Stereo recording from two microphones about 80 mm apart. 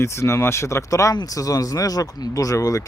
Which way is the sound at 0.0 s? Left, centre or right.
Left.